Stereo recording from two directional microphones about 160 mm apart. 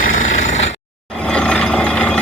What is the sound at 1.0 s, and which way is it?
Vehicle, 5° left (ahead or behind).